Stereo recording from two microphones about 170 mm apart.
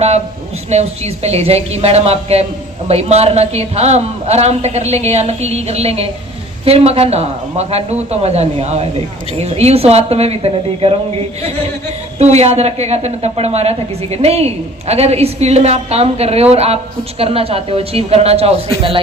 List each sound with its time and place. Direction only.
0.7 s a woman's voice: 40° right (ahead or behind)
12.2 s a woman's voice: 40° right (ahead or behind)